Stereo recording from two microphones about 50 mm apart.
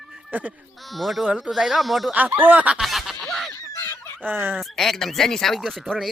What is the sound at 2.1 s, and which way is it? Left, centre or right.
Speech, right.